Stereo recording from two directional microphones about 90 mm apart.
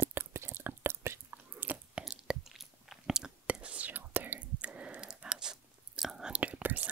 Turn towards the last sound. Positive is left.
turn(degrees=-15)  # may be behind; listen again after turning